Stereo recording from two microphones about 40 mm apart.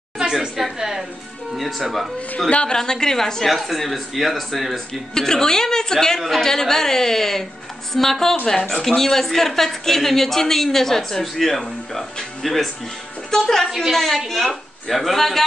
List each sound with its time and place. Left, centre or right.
0.2 s a sound: centre
0.7 s music: centre
1.5 s speech: centre
2.5 s a woman's voice: centre
3.4 s a woman's voice: centre
5.1 s a woman's voice: centre